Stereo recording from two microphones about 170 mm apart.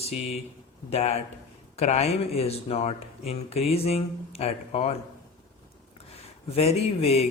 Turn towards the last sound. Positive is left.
turn(degrees=35)  # may be behind; listen again after turning